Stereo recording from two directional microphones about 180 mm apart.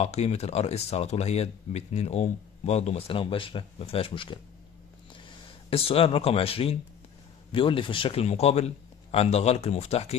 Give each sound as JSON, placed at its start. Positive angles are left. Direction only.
{"t": 0.0, "sound": "speech", "side_deg": 35}
{"t": 5.7, "sound": "speech", "side_deg": 30}